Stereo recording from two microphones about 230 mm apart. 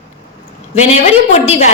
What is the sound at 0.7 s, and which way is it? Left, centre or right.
Speech, left.